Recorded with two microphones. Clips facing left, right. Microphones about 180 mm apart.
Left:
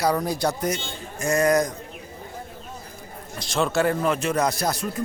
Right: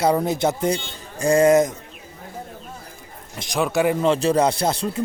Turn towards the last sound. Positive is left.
turn(degrees=-25)  # may be behind; listen again after turning